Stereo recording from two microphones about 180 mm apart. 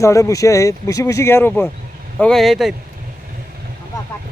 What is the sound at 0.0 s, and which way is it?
Speech, 15° left (ahead or behind).